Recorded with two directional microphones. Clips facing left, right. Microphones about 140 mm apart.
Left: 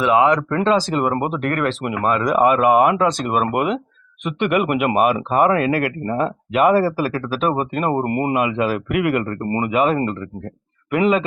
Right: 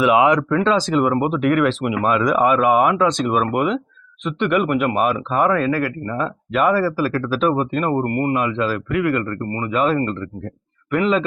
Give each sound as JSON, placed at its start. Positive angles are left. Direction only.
{"t": 0.0, "sound": "speech", "side_deg": -10}
{"t": 0.5, "sound": "a man's voice", "side_deg": 0}
{"t": 6.1, "sound": "speech", "side_deg": 25}
{"t": 6.5, "sound": "a man's voice", "side_deg": 10}